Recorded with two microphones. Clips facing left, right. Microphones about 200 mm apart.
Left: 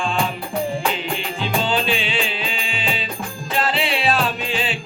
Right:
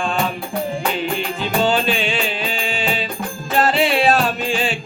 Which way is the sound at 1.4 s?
45° right (ahead or behind).